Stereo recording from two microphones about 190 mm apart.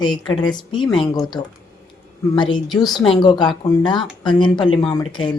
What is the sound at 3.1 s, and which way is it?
Speech, 25° left (ahead or behind).